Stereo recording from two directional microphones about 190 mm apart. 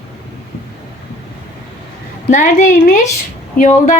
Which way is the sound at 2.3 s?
40° left (ahead or behind).